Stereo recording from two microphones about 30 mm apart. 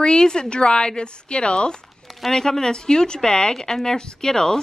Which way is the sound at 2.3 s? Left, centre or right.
Centre.